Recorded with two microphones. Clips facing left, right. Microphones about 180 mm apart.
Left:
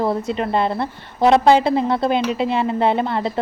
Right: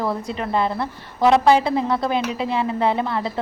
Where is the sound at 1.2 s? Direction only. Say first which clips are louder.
Left 2 dB; 25° left (ahead or behind).